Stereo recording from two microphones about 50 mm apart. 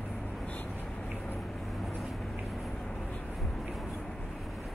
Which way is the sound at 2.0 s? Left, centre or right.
Centre.